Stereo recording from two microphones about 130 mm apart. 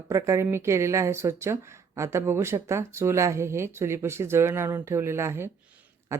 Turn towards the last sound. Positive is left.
turn(degrees=-20)  # may be behind; listen again after turning